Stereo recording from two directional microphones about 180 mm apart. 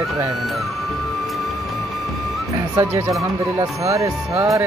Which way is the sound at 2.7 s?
15° right (ahead or behind).